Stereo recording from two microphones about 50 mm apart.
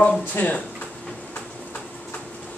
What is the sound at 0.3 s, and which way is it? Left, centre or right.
Speech, left.